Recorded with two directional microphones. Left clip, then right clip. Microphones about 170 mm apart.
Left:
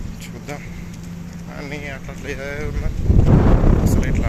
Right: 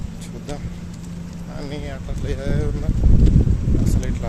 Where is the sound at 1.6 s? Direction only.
20° right (ahead or behind).